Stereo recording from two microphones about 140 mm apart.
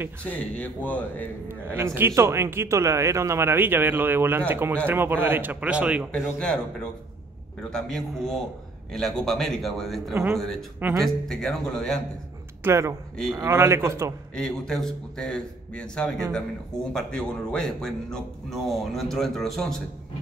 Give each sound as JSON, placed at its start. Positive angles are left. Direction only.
{"t": 0.2, "sound": "a man's voice", "side_deg": 10}
{"t": 1.5, "sound": "speech", "side_deg": -20}
{"t": 6.1, "sound": "speech", "side_deg": 5}
{"t": 10.1, "sound": "a man's voice", "side_deg": -20}
{"t": 11.2, "sound": "speech", "side_deg": 5}
{"t": 12.6, "sound": "a man's voice", "side_deg": -20}
{"t": 14.3, "sound": "speech", "side_deg": 5}